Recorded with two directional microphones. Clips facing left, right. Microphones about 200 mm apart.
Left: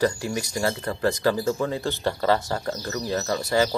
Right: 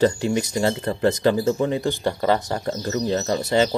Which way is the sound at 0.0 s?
25° right (ahead or behind).